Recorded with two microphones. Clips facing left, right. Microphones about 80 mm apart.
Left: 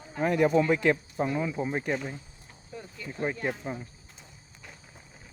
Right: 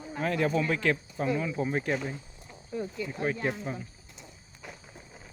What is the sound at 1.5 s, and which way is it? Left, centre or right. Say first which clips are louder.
Speech: even; centre.